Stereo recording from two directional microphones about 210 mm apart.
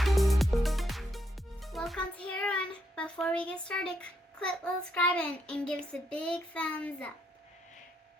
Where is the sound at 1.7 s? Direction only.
Centre (ahead or behind).